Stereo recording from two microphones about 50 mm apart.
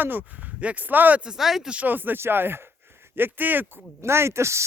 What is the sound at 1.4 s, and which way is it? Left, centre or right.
Speech, centre.